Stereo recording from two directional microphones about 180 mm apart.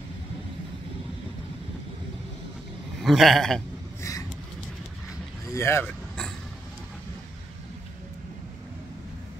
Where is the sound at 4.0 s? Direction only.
15° left (ahead or behind).